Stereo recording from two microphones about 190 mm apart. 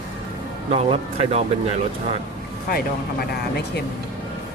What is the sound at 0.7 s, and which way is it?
Speech, 30° right (ahead or behind).